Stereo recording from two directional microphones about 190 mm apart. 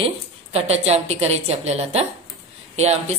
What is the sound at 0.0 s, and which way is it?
Speech, 30° right (ahead or behind).